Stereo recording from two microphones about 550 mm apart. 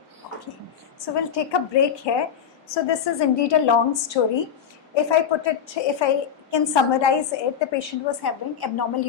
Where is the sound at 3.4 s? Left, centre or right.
Left.